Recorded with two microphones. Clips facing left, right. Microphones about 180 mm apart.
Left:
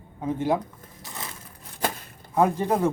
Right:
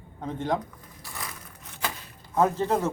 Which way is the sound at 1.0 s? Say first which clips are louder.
Left 1 dB; 20° left (ahead or behind).